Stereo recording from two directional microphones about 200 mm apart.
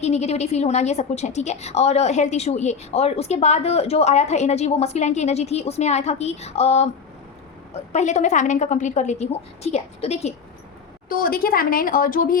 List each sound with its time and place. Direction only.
0.0 s a woman's voice: 35° left (ahead or behind)
11.1 s a woman's voice: 45° left (ahead or behind)